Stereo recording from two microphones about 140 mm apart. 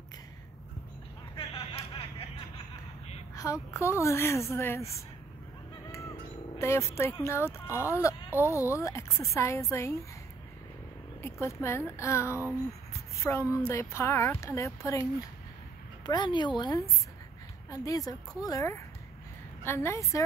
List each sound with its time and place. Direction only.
1.3 s a sound: 40° left (ahead or behind)
3.4 s a woman's voice: 20° left (ahead or behind)
5.9 s music: 20° left (ahead or behind)
6.6 s a woman's voice: 20° left (ahead or behind)
11.2 s a woman's voice: 20° left (ahead or behind)